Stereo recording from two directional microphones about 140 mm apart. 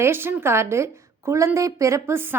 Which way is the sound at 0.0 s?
15° right (ahead or behind).